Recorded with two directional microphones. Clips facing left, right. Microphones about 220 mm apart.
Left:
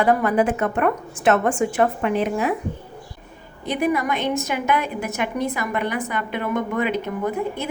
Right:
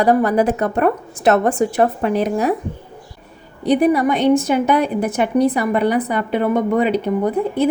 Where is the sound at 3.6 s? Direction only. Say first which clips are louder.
Right 7 dB; 35° right (ahead or behind).